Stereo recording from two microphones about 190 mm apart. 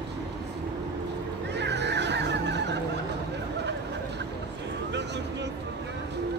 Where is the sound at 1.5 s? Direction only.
65° right (ahead or behind).